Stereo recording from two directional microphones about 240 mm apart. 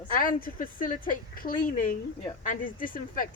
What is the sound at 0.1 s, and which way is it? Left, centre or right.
A woman's voice, left.